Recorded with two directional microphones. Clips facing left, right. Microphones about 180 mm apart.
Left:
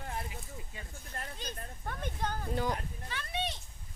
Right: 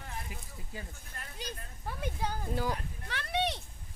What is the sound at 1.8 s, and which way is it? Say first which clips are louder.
Speech: right 1 dB; 10° right (ahead or behind).